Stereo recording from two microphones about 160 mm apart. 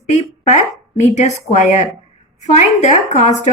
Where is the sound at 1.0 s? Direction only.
45° left (ahead or behind).